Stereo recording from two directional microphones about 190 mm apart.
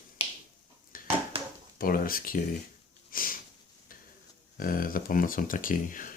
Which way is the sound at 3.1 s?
50° left (ahead or behind).